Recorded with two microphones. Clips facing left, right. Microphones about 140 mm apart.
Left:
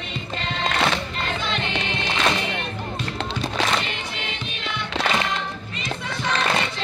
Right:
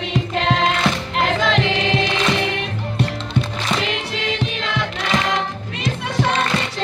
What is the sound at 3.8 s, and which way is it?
Music, 90° right.